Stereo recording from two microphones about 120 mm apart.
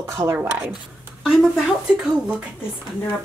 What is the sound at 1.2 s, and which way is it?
Speech, 5° right (ahead or behind).